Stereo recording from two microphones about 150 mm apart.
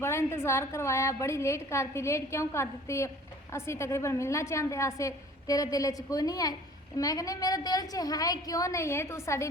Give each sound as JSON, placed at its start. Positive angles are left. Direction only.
{"t": 0.0, "sound": "a woman's voice", "side_deg": 15}